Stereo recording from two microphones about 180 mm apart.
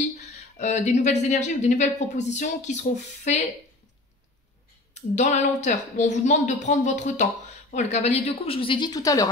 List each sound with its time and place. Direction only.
0.6 s a woman's voice: 40° left (ahead or behind)
4.9 s a woman's voice: 40° left (ahead or behind); by 9.3 s 20° left (ahead or behind)